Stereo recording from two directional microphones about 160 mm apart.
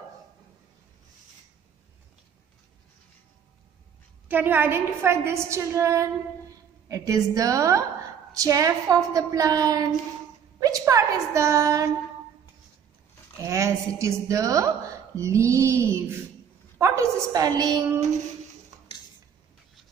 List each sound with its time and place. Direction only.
4.3 s a woman's voice: 10° right (ahead or behind)
13.4 s a woman's voice: 20° right (ahead or behind)